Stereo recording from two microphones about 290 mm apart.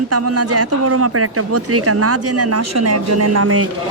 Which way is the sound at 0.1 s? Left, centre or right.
Right.